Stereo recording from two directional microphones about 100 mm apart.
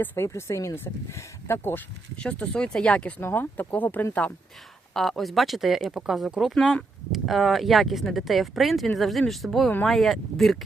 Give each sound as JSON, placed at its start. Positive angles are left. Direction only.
{"t": 0.0, "sound": "speech", "side_deg": 20}
{"t": 2.2, "sound": "speech", "side_deg": 10}
{"t": 4.9, "sound": "speech", "side_deg": 5}
{"t": 6.6, "sound": "speech", "side_deg": 10}